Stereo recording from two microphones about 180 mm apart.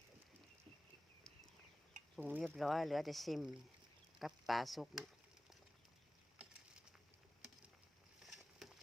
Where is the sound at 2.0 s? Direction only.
45° right (ahead or behind).